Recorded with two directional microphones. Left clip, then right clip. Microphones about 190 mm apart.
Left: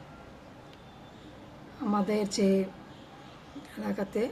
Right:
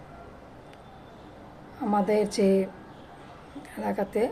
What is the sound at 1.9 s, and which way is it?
Speech, 15° left (ahead or behind).